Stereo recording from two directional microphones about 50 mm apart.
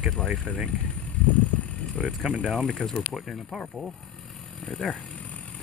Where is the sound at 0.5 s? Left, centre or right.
Centre.